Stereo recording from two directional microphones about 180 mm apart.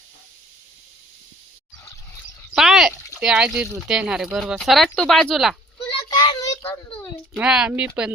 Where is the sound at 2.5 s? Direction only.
Centre (ahead or behind).